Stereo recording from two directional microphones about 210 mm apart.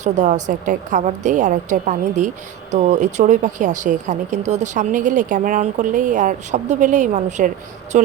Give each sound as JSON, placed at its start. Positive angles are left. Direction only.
{"t": 0.0, "sound": "speech", "side_deg": -35}